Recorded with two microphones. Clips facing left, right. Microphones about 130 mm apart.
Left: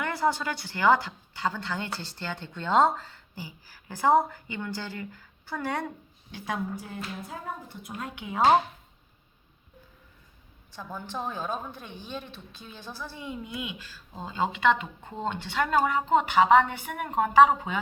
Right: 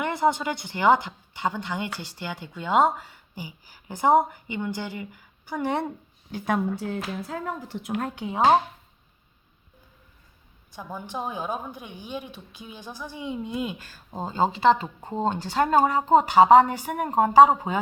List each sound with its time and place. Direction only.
0.0 s a woman's voice: 20° right (ahead or behind)
6.3 s a woman's voice: 50° right (ahead or behind)
6.7 s a woman's voice: 90° right; by 8.0 s 70° right (ahead or behind)
8.0 s speech: 35° right (ahead or behind)
10.7 s a woman's voice: 15° right (ahead or behind)
13.5 s speech: 40° right (ahead or behind)